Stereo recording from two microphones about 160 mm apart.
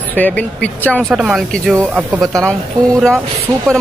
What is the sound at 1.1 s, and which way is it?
Speech, 5° right (ahead or behind).